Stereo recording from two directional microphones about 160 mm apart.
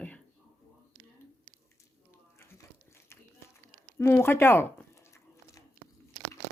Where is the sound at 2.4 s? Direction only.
15° left (ahead or behind).